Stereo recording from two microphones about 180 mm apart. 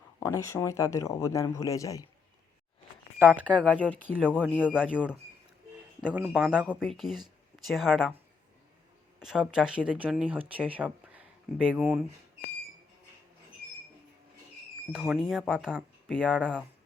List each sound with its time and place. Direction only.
0.2 s speech: 15° left (ahead or behind)
3.6 s speech: 5° left (ahead or behind)
4.2 s speech: 5° right (ahead or behind)
9.2 s speech: 5° right (ahead or behind)
14.9 s speech: centre (ahead or behind)